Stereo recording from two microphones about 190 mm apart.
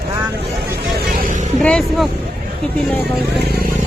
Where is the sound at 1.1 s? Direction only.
45° right (ahead or behind).